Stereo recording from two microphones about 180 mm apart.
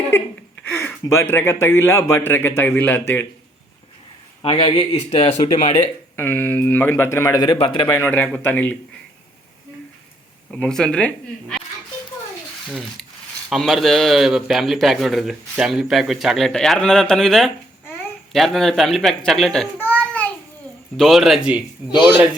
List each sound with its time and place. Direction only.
0.6 s speech: 10° left (ahead or behind)
4.4 s speech: 30° left (ahead or behind)
6.1 s speech: 10° left (ahead or behind); by 7.9 s 30° left (ahead or behind)
7.9 s speech: 10° left (ahead or behind)
10.5 s a man's voice: 5° left (ahead or behind)
12.6 s a man's voice: centre (ahead or behind)